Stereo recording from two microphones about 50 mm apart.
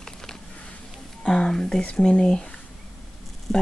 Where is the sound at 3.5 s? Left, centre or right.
Centre.